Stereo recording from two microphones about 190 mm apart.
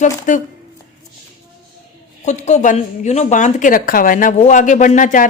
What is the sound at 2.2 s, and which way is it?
A woman's voice, 40° left (ahead or behind).